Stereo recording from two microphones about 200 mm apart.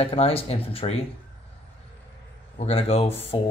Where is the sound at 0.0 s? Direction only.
30° left (ahead or behind).